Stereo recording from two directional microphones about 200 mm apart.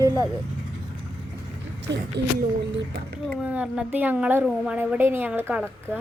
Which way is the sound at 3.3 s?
5° right (ahead or behind).